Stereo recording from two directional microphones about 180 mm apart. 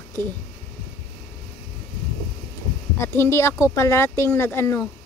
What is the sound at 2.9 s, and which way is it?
A woman's voice, 15° left (ahead or behind).